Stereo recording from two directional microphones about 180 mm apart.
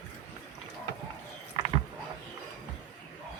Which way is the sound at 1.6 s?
20° right (ahead or behind).